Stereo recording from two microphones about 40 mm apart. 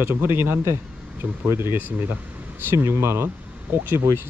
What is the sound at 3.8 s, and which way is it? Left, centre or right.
Speech, right.